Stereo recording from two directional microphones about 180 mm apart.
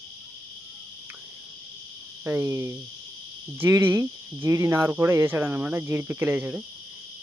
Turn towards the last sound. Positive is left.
turn(degrees=-10)  # may be behind; listen again after turning